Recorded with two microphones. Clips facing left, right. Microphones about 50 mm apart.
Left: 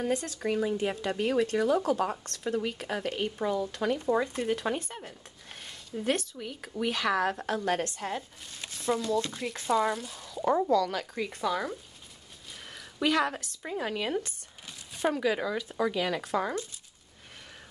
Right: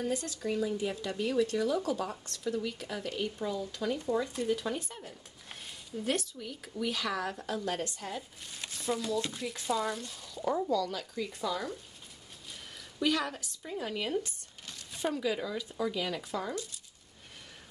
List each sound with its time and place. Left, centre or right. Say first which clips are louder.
0.0 s speech: left 4 dB; left
5.9 s a woman's voice: left 3 dB; left
8.2 s speech: left 1 dB; centre
9.7 s speech: left 6 dB; left
9.9 s speech: left 3 dB; centre
10.4 s speech: left 5 dB; left
13.0 s a woman's voice: left 4 dB; left
13.6 s speech: left 3 dB; left
15.0 s speech: left 4 dB; left